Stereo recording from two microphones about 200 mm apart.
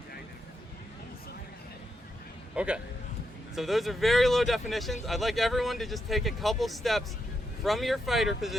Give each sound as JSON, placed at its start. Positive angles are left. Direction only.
{"t": 2.6, "sound": "speech", "side_deg": -5}